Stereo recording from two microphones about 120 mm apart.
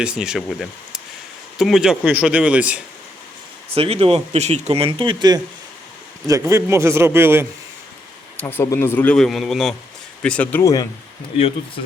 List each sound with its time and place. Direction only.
0.0 s a man's voice: 5° right (ahead or behind)
3.8 s speech: 55° right (ahead or behind); by 5.4 s 40° right (ahead or behind)
6.2 s a man's voice: 25° right (ahead or behind)
8.4 s speech: 15° left (ahead or behind)
9.1 s a man's voice: 5° left (ahead or behind)
10.6 s speech: 30° left (ahead or behind)